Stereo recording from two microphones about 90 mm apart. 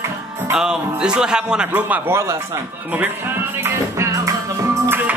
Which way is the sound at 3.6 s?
30° right (ahead or behind).